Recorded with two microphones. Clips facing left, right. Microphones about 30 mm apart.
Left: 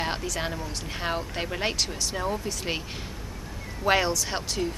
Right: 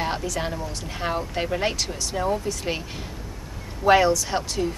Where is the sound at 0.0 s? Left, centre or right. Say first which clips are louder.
Right 3 dB; centre.